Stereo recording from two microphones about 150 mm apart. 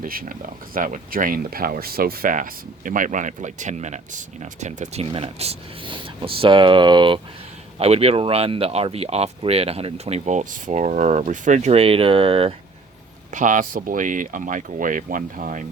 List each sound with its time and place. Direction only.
0.0 s speech: 70° right (ahead or behind); by 7.2 s 30° right (ahead or behind)
7.8 s speech: 40° right (ahead or behind)
13.3 s speech: 60° right (ahead or behind)